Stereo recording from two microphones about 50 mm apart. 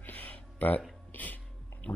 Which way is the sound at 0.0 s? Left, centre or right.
Left.